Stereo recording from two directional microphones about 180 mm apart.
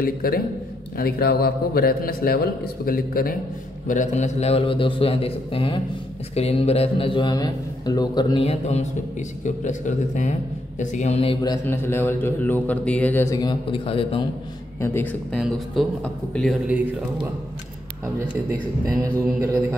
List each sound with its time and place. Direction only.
0.0 s a man's voice: 55° left (ahead or behind); by 8.5 s 25° left (ahead or behind)
8.5 s a man's voice: 35° left (ahead or behind)
11.4 s a man's voice: 15° left (ahead or behind)
14.8 s a man's voice: 10° left (ahead or behind)
15.3 s speech: centre (ahead or behind)